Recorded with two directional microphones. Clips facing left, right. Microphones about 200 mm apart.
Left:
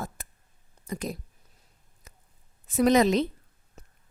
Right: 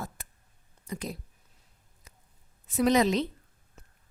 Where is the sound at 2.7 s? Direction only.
45° left (ahead or behind).